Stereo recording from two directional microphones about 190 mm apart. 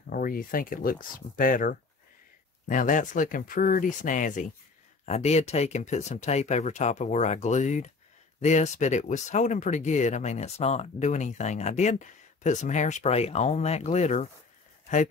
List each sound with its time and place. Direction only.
0.1 s speech: 50° left (ahead or behind)